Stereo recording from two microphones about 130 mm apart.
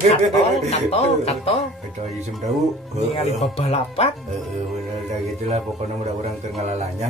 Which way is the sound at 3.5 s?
50° left (ahead or behind).